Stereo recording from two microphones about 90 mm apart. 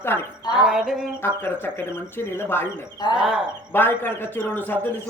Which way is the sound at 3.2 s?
5° right (ahead or behind).